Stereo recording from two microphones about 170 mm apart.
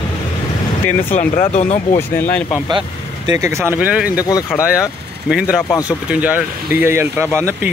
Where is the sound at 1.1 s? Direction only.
45° left (ahead or behind).